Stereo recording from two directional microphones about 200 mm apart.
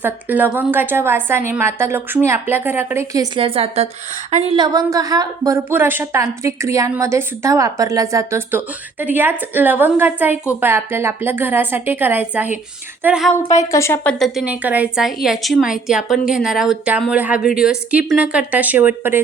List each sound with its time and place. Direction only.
0.0 s a woman's voice: 10° right (ahead or behind); by 4.5 s 35° right (ahead or behind)
4.5 s a woman's voice: 20° right (ahead or behind)
13.6 s a woman's voice: 15° left (ahead or behind); by 19.2 s 10° right (ahead or behind)